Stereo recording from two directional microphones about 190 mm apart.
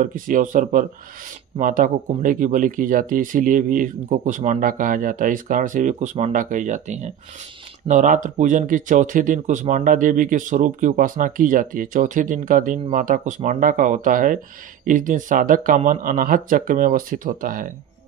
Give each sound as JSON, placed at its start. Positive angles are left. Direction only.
{"t": 0.0, "sound": "speech", "side_deg": -45}